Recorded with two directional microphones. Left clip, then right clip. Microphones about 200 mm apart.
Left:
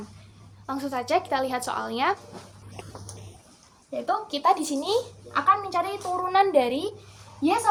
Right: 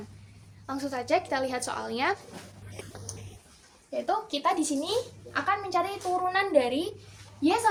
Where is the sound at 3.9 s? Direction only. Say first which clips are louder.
Left 2 dB; 15° left (ahead or behind).